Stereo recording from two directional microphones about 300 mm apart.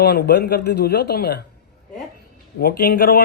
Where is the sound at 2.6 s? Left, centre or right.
Left.